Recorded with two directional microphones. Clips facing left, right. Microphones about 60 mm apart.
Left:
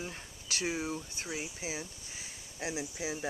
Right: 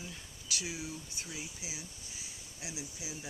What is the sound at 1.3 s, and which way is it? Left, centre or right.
Speech, left.